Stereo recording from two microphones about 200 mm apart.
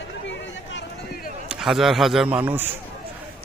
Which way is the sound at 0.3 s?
65° left (ahead or behind).